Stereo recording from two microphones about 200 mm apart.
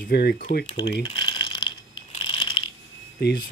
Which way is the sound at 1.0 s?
20° left (ahead or behind).